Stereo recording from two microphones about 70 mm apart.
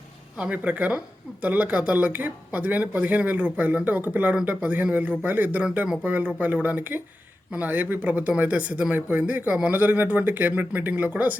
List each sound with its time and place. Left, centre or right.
0.3 s speech: centre